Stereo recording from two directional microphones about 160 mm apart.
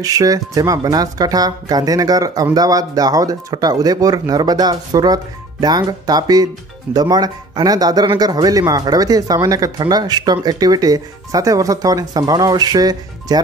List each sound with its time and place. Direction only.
0.0 s speech: 20° right (ahead or behind)